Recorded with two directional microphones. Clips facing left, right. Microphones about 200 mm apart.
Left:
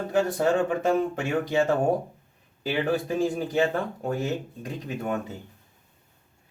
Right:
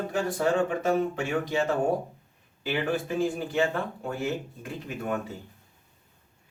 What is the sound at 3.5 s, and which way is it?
Speech, 40° left (ahead or behind).